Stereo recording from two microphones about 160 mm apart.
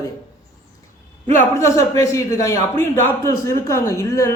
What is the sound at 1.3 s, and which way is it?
A man's voice, 15° left (ahead or behind).